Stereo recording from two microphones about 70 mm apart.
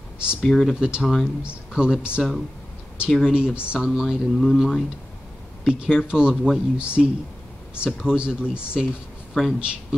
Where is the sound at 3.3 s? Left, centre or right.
Centre.